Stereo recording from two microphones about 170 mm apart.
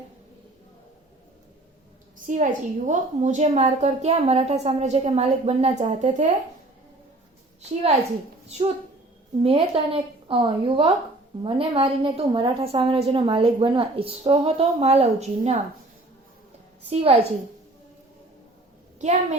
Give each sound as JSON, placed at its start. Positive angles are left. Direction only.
{"t": 2.2, "sound": "a woman's voice", "side_deg": -50}
{"t": 9.4, "sound": "a woman's voice", "side_deg": -35}
{"t": 16.9, "sound": "a woman's voice", "side_deg": -35}
{"t": 18.9, "sound": "a woman's voice", "side_deg": -40}